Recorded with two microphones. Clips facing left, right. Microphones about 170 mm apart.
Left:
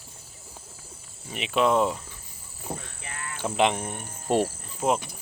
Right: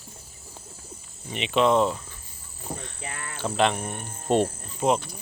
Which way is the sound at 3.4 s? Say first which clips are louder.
Even; 15° left (ahead or behind).